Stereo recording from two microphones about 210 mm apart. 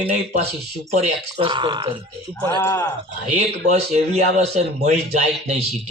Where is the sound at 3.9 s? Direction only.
30° right (ahead or behind).